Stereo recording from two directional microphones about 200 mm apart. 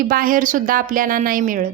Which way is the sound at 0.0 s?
45° right (ahead or behind).